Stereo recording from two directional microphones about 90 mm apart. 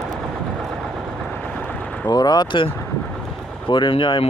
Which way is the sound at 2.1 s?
50° left (ahead or behind).